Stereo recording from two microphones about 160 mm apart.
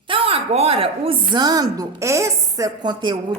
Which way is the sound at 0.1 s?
40° right (ahead or behind).